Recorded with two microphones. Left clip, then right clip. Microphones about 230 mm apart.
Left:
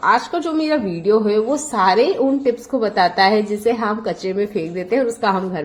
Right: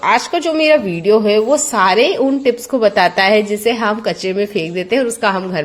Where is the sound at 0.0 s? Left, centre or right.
Right.